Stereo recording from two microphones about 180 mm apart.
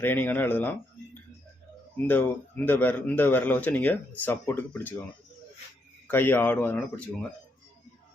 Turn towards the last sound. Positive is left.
turn(degrees=10)  # may be behind; listen again after turning